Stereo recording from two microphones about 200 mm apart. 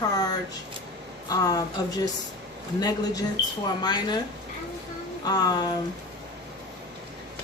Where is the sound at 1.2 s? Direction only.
20° left (ahead or behind).